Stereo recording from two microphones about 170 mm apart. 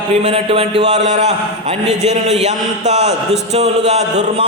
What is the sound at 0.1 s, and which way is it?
A man's voice, 40° right (ahead or behind).